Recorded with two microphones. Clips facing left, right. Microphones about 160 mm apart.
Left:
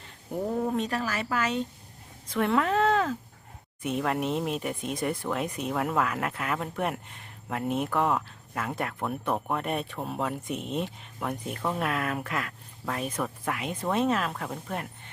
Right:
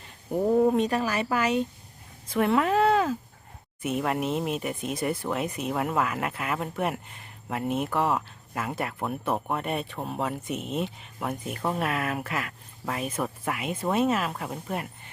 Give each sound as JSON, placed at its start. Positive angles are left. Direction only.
{"t": 0.5, "sound": "speech", "side_deg": -20}